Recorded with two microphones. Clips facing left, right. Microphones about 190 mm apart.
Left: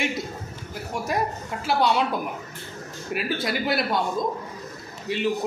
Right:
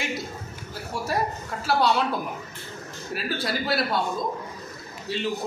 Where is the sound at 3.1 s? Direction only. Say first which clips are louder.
Left 2 dB; 15° left (ahead or behind).